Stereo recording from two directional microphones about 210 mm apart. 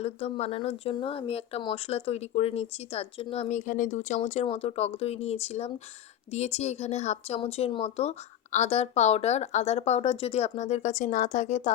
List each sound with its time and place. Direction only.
0.0 s speech: 30° left (ahead or behind)